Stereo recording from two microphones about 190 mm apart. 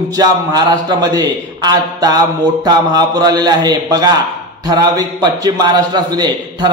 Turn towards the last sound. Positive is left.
turn(degrees=-20)  # may be behind; listen again after turning